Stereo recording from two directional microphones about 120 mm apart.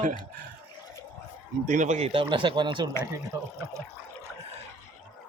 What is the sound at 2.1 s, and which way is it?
Speech, 45° right (ahead or behind).